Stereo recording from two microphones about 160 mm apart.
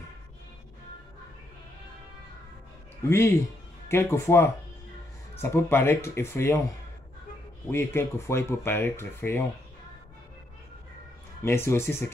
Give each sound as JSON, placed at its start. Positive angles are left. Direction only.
{"t": 3.1, "sound": "speech", "side_deg": 15}
{"t": 7.7, "sound": "speech", "side_deg": 15}
{"t": 11.4, "sound": "speech", "side_deg": 15}